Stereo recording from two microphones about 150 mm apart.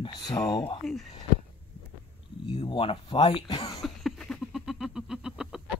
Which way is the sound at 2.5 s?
40° left (ahead or behind).